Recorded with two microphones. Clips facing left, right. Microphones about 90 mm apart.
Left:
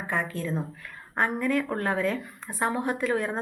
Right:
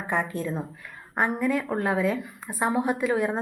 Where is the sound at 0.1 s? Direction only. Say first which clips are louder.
Right 2 dB; 20° right (ahead or behind).